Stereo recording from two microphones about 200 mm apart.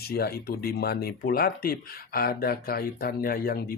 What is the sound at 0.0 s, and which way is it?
Speech, 50° left (ahead or behind).